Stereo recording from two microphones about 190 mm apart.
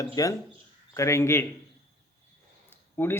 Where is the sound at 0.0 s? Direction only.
20° left (ahead or behind).